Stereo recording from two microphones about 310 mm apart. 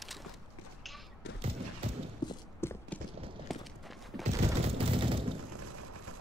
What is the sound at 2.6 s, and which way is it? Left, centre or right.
Clip-clop, centre.